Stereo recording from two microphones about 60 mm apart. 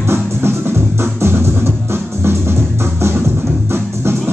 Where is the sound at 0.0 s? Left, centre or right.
Right.